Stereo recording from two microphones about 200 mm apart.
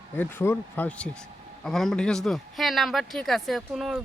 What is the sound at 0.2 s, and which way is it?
Speech, 10° left (ahead or behind).